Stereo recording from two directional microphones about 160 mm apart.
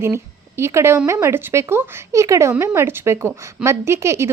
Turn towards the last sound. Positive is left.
turn(degrees=-15)  # may be behind; listen again after turning